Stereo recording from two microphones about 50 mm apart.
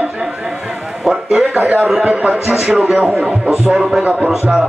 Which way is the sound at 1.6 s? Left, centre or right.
Right.